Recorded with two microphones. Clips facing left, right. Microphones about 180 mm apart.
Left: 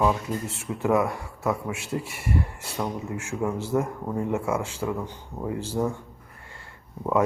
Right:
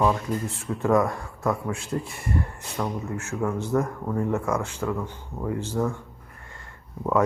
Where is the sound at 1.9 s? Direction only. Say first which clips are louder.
Left 2 dB; 15° left (ahead or behind).